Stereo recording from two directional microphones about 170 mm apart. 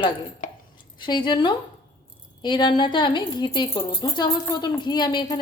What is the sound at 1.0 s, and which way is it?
A woman's voice, 25° left (ahead or behind).